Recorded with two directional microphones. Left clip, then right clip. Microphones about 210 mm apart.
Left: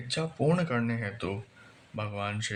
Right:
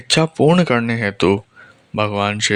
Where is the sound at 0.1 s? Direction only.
45° right (ahead or behind).